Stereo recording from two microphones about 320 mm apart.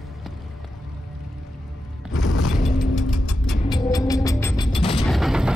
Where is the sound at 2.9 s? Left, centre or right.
Left.